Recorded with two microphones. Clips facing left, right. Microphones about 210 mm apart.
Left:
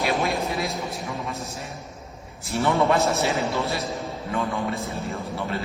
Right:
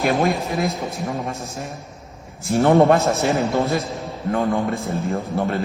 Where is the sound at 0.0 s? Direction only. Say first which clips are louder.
Right 5 dB; 45° right (ahead or behind).